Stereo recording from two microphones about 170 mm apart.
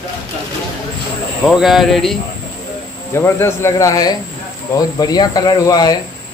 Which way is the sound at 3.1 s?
15° left (ahead or behind).